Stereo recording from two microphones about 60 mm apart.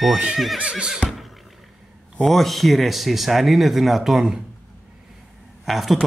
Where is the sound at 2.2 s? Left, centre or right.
Centre.